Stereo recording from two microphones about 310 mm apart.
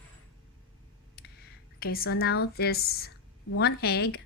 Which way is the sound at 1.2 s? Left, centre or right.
Left.